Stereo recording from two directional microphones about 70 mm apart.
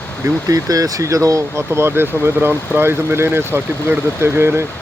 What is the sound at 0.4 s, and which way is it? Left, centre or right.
Speech, right.